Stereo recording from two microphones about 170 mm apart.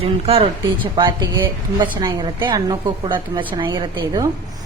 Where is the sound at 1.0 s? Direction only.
25° right (ahead or behind).